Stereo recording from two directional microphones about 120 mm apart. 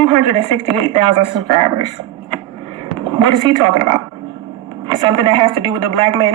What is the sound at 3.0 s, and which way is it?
Speech, 40° right (ahead or behind).